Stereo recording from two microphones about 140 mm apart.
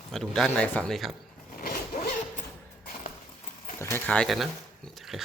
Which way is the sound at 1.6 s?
90° left.